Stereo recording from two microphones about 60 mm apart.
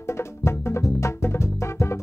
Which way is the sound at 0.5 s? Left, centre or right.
Left.